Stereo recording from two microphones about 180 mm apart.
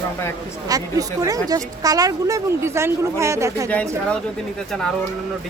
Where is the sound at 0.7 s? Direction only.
20° right (ahead or behind).